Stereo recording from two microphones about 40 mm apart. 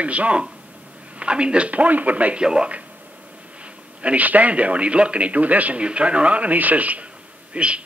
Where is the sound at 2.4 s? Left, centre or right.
Right.